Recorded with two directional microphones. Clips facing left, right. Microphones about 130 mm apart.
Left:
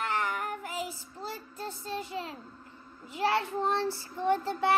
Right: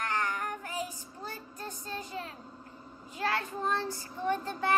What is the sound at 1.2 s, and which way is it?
Child singing, 30° left (ahead or behind).